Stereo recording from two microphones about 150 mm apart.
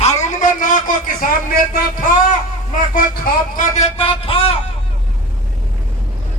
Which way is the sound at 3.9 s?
40° left (ahead or behind).